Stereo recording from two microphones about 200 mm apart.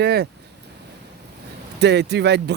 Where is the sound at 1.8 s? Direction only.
60° right (ahead or behind).